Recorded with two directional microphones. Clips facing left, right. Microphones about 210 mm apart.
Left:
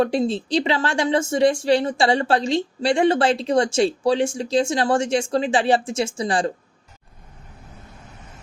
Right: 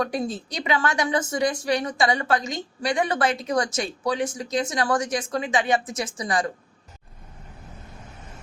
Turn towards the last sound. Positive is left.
turn(degrees=30)  # may be behind; listen again after turning